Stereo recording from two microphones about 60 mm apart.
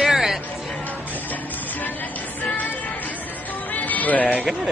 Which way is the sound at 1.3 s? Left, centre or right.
Left.